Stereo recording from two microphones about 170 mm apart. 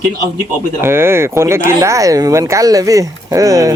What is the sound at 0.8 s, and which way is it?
Speech, 15° right (ahead or behind).